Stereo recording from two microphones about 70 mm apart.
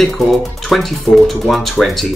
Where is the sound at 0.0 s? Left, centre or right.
Centre.